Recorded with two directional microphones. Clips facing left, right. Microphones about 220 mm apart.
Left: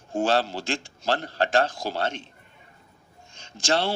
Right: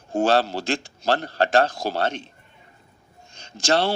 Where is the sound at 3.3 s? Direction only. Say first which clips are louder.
Right 3 dB; 40° right (ahead or behind).